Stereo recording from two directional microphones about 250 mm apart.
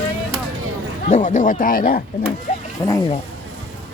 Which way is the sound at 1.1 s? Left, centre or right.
Left.